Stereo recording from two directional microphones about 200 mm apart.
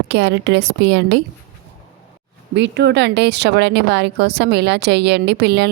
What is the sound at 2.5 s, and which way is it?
Speech, 60° right (ahead or behind).